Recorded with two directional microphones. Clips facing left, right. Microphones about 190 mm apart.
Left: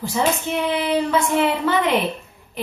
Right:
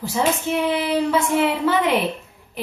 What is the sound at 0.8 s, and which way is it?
Speech, 5° right (ahead or behind).